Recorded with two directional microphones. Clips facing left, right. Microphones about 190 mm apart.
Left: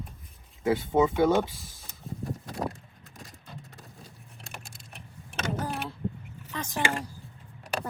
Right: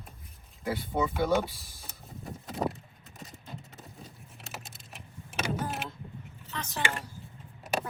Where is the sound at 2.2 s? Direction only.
Centre (ahead or behind).